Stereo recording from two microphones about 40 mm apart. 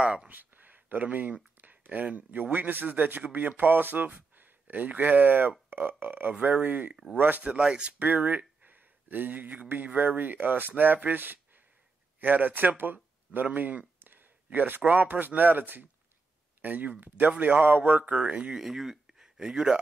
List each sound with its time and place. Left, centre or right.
0.0 s speech: right
0.3 s speech: right
3.2 s speech: right
6.4 s speech: right
7.4 s speech: right
8.3 s a sound: right
9.9 s speech: right
18.1 s speech: right
18.6 s speech: centre